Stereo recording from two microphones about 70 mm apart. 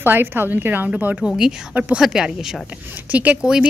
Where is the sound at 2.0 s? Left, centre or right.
Centre.